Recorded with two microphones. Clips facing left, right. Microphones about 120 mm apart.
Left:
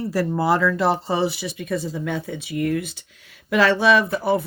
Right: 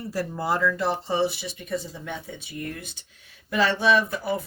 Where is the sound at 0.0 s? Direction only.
90° left.